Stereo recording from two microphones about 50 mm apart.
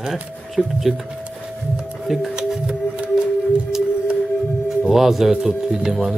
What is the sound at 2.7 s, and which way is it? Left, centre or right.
Music, centre.